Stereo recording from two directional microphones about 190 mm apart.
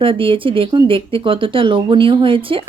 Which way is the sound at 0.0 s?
25° right (ahead or behind).